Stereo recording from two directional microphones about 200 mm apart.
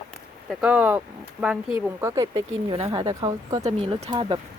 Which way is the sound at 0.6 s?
10° right (ahead or behind).